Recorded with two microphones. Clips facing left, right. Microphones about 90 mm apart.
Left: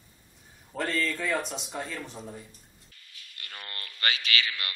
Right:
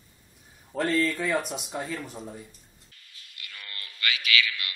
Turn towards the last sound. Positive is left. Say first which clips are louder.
# right 3 dB
turn(degrees=35)  # may be behind; listen again after turning